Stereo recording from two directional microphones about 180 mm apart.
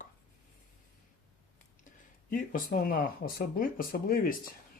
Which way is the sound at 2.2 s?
50° left (ahead or behind).